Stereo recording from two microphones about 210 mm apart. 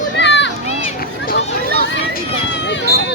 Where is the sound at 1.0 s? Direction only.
45° left (ahead or behind).